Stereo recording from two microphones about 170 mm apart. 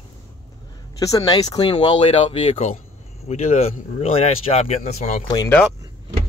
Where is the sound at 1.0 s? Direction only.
20° left (ahead or behind); by 5.2 s 40° left (ahead or behind).